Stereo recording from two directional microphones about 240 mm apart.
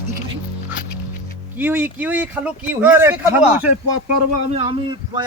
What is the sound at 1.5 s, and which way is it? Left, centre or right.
A man's voice, centre.